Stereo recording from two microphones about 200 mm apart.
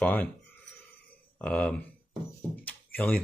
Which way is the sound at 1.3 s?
5° left (ahead or behind).